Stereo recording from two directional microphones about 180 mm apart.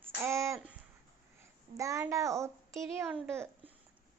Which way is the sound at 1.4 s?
15° right (ahead or behind).